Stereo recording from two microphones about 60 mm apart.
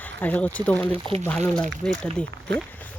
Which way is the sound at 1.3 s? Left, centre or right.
Centre.